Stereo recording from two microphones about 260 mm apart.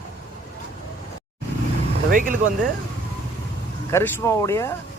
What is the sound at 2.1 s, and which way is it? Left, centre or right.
Speech, right.